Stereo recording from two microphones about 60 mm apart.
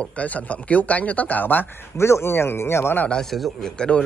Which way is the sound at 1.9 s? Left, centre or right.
Left.